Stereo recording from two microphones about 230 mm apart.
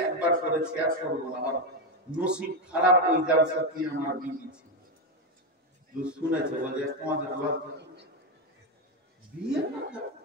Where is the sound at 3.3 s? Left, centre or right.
Right.